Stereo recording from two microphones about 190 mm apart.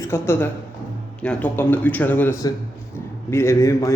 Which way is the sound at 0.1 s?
10° left (ahead or behind).